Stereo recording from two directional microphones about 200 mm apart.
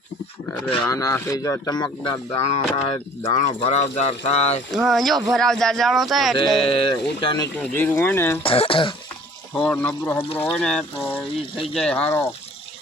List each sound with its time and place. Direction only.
0.7 s speech: 15° left (ahead or behind); by 4.6 s 30° left (ahead or behind)
4.7 s speech: centre (ahead or behind)
6.6 s speech: 25° left (ahead or behind)
7.6 s speech: 10° left (ahead or behind)
8.4 s speech: 25° left (ahead or behind)
9.6 s speech: 5° left (ahead or behind)